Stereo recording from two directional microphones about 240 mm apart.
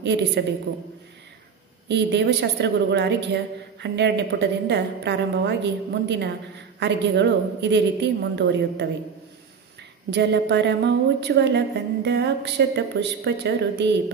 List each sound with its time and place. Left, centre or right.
0.4 s a woman's voice: right
1.9 s a woman's voice: right
10.1 s a woman's voice: right